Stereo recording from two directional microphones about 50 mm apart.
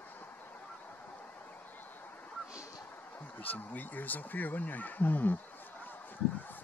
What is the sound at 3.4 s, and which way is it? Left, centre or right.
Speech, left.